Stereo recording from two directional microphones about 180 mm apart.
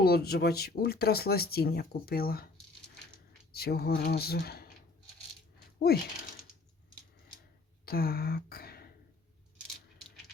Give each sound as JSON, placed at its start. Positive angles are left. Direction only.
{"t": 0.0, "sound": "speech", "side_deg": 60}
{"t": 3.5, "sound": "speech", "side_deg": 60}
{"t": 5.9, "sound": "speech", "side_deg": 60}
{"t": 7.9, "sound": "speech", "side_deg": 55}